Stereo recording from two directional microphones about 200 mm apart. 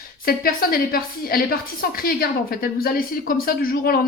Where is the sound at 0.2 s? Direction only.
50° left (ahead or behind).